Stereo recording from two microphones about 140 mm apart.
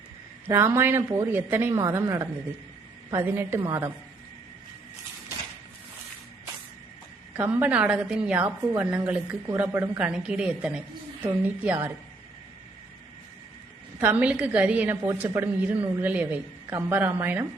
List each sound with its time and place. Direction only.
0.4 s a woman's voice: 20° right (ahead or behind)
7.3 s a woman's voice: 15° right (ahead or behind)
14.0 s a woman's voice: 10° right (ahead or behind)